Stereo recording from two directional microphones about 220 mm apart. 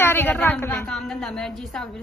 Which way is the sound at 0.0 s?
10° left (ahead or behind).